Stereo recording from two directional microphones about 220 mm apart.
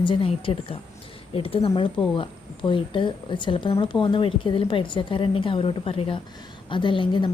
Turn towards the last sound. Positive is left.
turn(degrees=20)  # may be behind; listen again after turning